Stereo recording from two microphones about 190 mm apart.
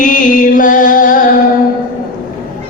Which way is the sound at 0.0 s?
45° left (ahead or behind).